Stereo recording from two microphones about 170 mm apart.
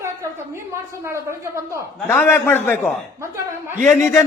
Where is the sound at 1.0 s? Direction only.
20° right (ahead or behind).